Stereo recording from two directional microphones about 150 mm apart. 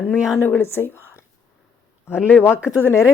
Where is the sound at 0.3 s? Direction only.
15° left (ahead or behind).